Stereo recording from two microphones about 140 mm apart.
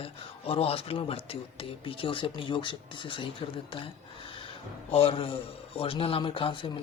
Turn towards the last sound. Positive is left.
turn(degrees=40)  # may be behind; listen again after turning